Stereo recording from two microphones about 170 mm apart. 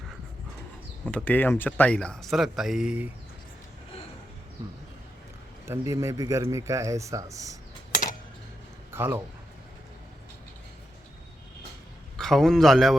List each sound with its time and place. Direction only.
1.1 s speech: 10° left (ahead or behind); by 3.1 s 5° right (ahead or behind)
5.6 s a man's voice: 15° right (ahead or behind)
8.9 s a man's voice: 15° right (ahead or behind)
12.1 s a man's voice: centre (ahead or behind)